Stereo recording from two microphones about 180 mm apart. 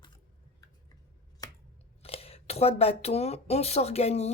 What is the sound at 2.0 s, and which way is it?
Speech, 35° left (ahead or behind).